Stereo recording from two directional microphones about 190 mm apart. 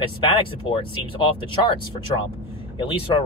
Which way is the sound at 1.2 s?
25° left (ahead or behind).